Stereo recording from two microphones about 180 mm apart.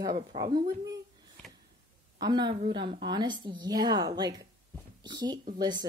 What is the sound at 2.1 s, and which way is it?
A woman's voice, 25° right (ahead or behind).